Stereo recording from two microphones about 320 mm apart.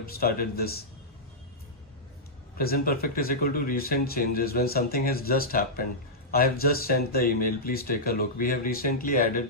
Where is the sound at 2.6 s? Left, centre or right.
Left.